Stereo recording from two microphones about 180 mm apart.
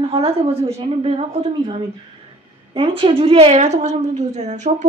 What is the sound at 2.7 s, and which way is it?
A woman's voice, 30° right (ahead or behind).